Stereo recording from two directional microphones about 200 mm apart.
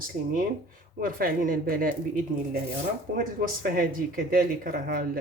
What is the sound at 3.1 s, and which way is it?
Speech, 45° right (ahead or behind).